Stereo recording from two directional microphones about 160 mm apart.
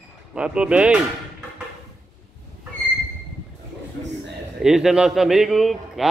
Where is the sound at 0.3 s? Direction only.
5° right (ahead or behind).